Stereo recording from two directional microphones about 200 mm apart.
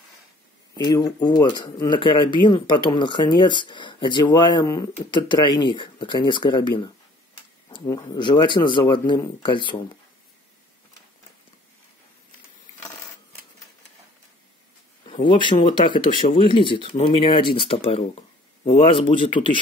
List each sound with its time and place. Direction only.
0.7 s speech: 20° left (ahead or behind)
15.2 s speech: 25° left (ahead or behind)
16.1 s speech: 40° left (ahead or behind)
16.3 s speech: 25° left (ahead or behind)